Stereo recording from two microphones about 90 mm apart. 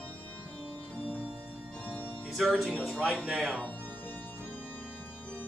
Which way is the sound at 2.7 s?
10° left (ahead or behind).